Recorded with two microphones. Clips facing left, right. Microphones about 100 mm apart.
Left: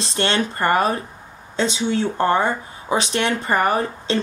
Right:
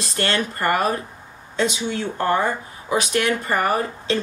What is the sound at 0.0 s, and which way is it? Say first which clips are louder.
Speech: left 2 dB; 25° left (ahead or behind).